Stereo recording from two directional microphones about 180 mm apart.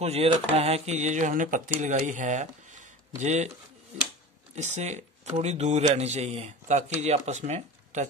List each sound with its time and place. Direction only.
0.0 s a man's voice: 35° right (ahead or behind)
4.6 s a man's voice: 40° right (ahead or behind)